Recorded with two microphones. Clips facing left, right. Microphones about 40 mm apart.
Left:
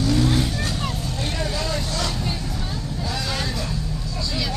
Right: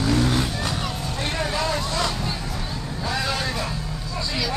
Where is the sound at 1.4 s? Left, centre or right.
Right.